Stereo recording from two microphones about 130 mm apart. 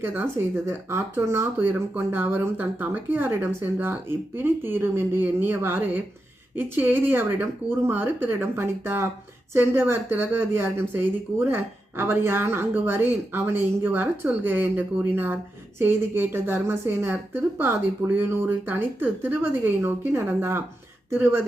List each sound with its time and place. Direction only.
0.0 s speech: 15° right (ahead or behind)
18.2 s speech: 15° right (ahead or behind)